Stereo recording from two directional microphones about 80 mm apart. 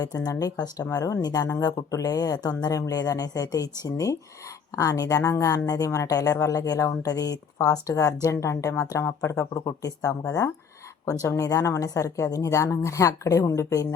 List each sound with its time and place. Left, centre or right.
0.2 s a woman's voice: left